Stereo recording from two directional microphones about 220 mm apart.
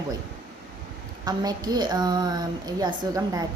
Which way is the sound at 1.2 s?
15° right (ahead or behind).